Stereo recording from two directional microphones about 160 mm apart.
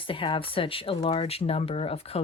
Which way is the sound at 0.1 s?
35° left (ahead or behind).